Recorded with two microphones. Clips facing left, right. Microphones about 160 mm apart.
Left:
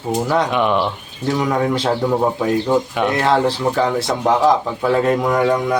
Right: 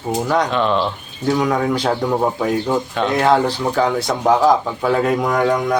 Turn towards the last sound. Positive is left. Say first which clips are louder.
# left 1 dB
turn(degrees=5)  # may be behind; listen again after turning